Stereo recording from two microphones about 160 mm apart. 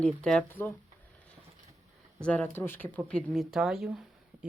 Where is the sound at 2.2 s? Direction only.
10° left (ahead or behind).